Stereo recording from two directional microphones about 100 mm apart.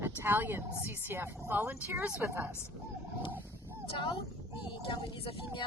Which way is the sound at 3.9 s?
60° left (ahead or behind).